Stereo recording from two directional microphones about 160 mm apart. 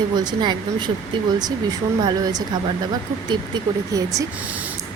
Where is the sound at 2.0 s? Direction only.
25° right (ahead or behind).